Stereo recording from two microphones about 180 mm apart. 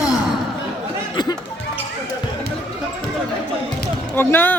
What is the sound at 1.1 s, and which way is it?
Music, 25° left (ahead or behind).